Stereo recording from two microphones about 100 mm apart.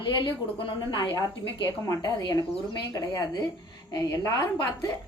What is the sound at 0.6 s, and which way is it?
Speech, 55° left (ahead or behind).